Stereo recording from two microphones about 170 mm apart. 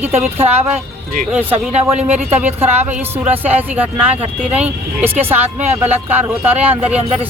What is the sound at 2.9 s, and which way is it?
Speech, 10° right (ahead or behind).